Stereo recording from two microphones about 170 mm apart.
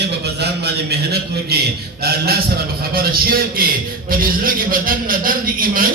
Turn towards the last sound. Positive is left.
turn(degrees=-55)  # may be behind; listen again after turning